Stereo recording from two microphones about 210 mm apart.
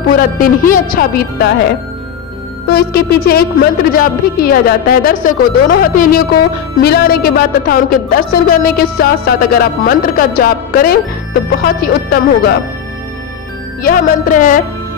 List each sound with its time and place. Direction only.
0.1 s speech: 40° left (ahead or behind)
2.7 s speech: 50° left (ahead or behind)
13.8 s speech: 40° left (ahead or behind)